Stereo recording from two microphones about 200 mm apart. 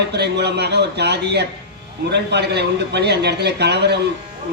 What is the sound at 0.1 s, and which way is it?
A man's voice, 55° right (ahead or behind).